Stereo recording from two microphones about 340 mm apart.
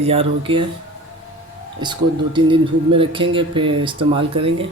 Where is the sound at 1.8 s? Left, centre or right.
Centre.